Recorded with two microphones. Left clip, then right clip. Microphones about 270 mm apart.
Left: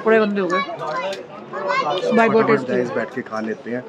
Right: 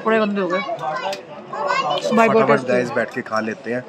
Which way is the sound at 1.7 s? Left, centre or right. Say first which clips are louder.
Left 1 dB; right.